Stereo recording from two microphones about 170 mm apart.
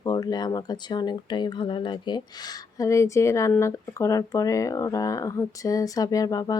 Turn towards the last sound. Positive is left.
turn(degrees=20)  # may be behind; listen again after turning